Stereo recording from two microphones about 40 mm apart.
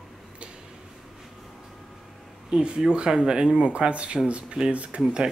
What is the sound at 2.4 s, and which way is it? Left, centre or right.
Speech, centre.